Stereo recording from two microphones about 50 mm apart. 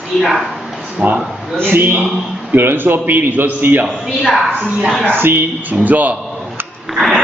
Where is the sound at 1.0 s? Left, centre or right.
Right.